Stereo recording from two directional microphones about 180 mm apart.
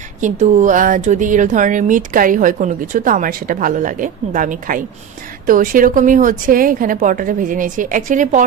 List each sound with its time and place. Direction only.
0.2 s speech: 45° right (ahead or behind)